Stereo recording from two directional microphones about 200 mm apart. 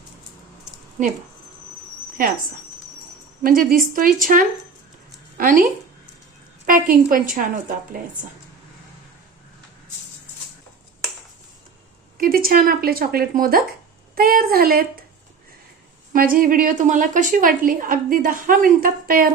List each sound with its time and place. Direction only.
3.4 s a woman's voice: 45° right (ahead or behind)
6.7 s a woman's voice: 45° right (ahead or behind)
12.1 s a woman's voice: 45° right (ahead or behind)
16.1 s a woman's voice: 45° right (ahead or behind)